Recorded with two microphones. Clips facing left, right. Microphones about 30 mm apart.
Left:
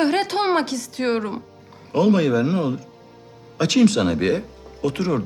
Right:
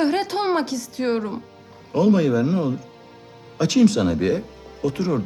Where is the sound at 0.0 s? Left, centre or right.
Centre.